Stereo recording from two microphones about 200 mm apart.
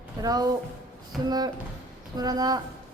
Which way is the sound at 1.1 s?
Centre (ahead or behind).